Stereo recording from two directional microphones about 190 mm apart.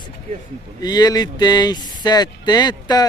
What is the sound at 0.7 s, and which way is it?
Speech, 20° left (ahead or behind).